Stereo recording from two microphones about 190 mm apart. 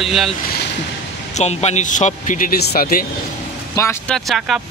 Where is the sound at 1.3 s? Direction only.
35° left (ahead or behind).